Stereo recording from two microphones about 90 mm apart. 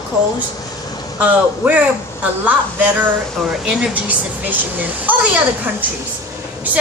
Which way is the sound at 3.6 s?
10° right (ahead or behind).